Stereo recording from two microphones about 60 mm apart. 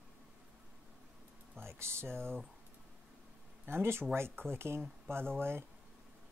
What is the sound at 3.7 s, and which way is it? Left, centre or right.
Speech, right.